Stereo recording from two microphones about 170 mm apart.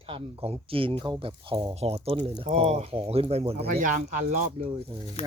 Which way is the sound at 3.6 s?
50° right (ahead or behind).